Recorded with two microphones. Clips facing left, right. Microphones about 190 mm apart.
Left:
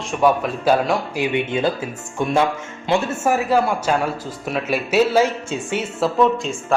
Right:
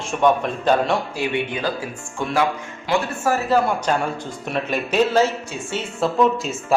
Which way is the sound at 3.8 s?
5° left (ahead or behind).